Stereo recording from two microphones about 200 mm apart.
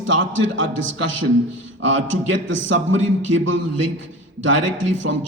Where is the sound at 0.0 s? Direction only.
75° right (ahead or behind).